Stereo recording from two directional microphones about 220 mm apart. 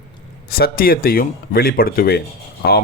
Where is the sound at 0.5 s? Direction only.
40° left (ahead or behind).